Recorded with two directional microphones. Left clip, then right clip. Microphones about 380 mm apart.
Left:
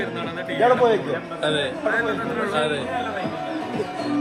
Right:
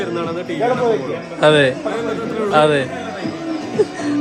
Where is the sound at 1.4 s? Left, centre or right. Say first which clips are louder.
Right 11 dB; centre.